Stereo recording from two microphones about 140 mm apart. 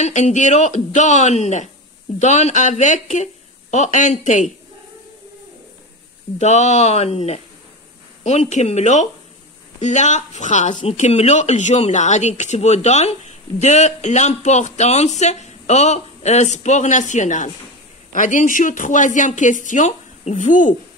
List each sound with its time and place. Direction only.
0.0 s speech: 55° left (ahead or behind)
6.3 s speech: 55° left (ahead or behind)